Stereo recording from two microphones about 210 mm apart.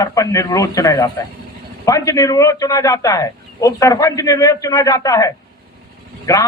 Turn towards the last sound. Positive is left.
turn(degrees=15)  # may be behind; listen again after turning